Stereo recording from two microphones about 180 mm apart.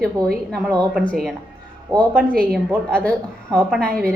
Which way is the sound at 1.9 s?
20° right (ahead or behind).